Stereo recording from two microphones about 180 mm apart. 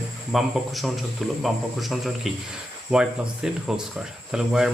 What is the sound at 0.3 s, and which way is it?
Speech, centre (ahead or behind).